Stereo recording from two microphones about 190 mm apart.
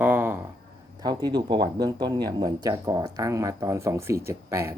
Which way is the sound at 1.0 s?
20° right (ahead or behind).